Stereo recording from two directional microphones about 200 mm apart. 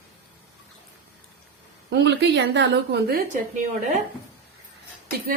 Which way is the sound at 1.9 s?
60° right (ahead or behind).